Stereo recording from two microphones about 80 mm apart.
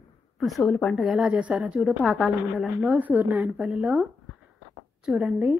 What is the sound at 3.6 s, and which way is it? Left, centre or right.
Speech, centre.